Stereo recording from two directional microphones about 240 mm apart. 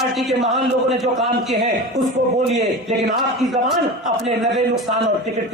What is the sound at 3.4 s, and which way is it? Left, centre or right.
A man's voice, centre.